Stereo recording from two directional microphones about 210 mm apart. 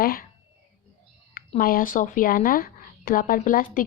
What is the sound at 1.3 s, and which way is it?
Speech, 45° left (ahead or behind).